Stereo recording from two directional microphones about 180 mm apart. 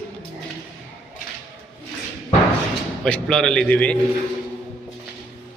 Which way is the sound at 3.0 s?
5° left (ahead or behind).